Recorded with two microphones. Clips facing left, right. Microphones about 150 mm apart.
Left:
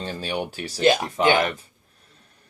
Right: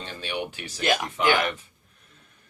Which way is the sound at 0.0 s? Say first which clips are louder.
Left 4 dB; 35° left (ahead or behind).